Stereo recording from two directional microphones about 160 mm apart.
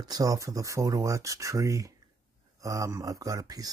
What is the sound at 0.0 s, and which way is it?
Speech, 25° right (ahead or behind).